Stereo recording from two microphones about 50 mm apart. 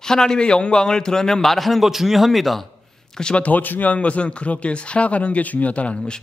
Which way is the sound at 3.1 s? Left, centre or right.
Centre.